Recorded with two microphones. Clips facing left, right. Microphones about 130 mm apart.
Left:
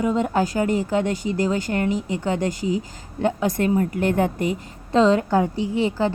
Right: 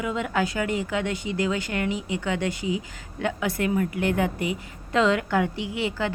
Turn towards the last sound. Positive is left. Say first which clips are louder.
# left 6 dB
turn(degrees=35)  # may be behind; listen again after turning